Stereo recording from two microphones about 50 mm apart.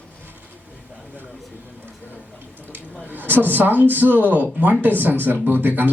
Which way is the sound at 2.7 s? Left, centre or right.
Right.